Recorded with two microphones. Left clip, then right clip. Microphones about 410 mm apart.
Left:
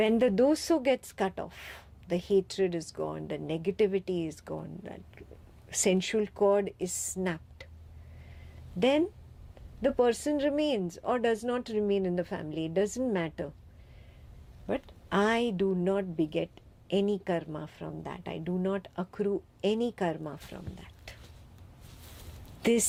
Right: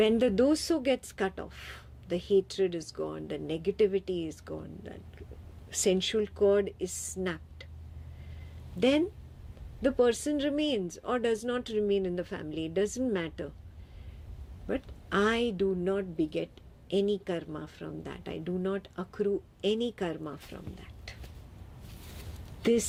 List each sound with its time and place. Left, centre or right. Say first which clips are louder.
0.0 s a woman's voice: even; left
8.8 s speech: even; left
14.7 s a woman's voice: left 1 dB; left
22.6 s speech: even; left